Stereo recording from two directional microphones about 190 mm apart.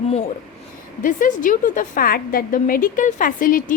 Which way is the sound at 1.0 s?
45° left (ahead or behind).